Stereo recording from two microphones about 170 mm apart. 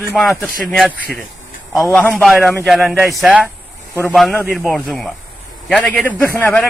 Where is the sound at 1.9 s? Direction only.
5° left (ahead or behind).